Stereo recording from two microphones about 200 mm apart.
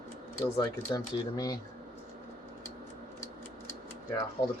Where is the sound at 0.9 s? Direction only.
20° left (ahead or behind).